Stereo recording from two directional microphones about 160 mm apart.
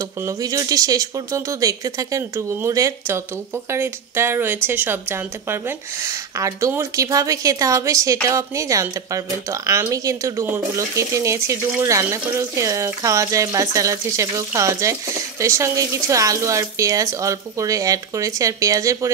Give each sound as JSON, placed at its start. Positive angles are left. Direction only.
{"t": 0.2, "sound": "a woman's voice", "side_deg": -20}